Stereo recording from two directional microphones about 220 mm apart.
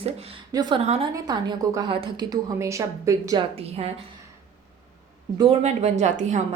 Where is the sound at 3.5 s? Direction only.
25° right (ahead or behind).